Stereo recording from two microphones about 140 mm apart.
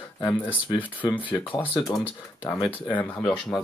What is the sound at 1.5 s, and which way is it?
Speech, 30° left (ahead or behind).